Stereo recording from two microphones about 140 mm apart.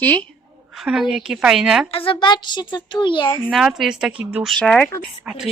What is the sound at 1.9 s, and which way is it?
Speech, 40° left (ahead or behind).